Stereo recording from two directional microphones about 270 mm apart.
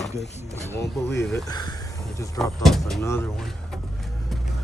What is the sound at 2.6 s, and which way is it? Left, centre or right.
Speech, centre.